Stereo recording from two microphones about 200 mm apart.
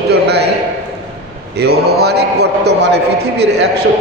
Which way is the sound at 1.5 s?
55° right (ahead or behind).